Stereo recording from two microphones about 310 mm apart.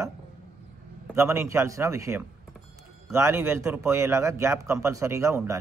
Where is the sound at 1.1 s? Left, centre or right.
Centre.